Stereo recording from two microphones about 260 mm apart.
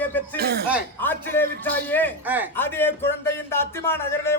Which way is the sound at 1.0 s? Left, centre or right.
Centre.